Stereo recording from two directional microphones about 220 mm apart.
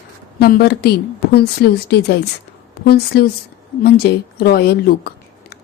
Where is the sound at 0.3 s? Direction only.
45° left (ahead or behind).